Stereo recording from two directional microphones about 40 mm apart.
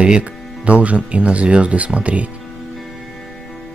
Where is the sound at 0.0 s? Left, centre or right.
Right.